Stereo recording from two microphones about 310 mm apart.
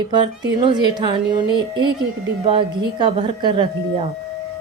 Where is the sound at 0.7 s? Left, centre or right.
Centre.